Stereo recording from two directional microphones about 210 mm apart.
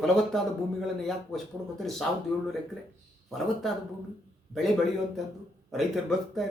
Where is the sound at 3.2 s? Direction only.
Centre (ahead or behind).